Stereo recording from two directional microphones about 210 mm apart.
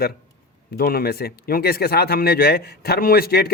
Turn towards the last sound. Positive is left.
turn(degrees=45)  # may be behind; listen again after turning